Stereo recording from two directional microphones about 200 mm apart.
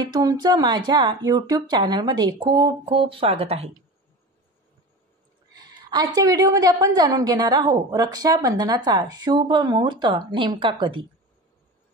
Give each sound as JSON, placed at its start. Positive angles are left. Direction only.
{"t": 0.0, "sound": "a woman's voice", "side_deg": -20}
{"t": 5.5, "sound": "a woman's voice", "side_deg": -20}